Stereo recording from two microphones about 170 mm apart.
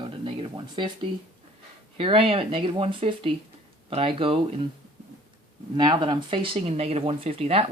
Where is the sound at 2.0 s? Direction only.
35° right (ahead or behind).